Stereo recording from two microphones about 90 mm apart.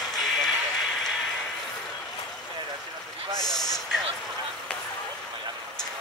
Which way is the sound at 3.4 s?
45° left (ahead or behind).